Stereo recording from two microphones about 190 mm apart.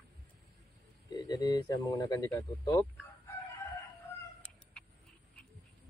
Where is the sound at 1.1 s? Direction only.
20° left (ahead or behind).